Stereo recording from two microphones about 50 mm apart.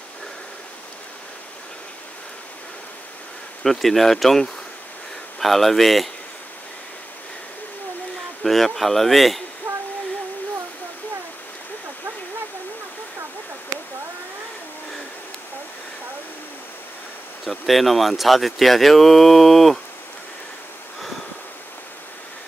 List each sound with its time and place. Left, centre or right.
3.6 s speech: centre
8.5 s speech: centre
9.6 s a sound: right
17.5 s speech: centre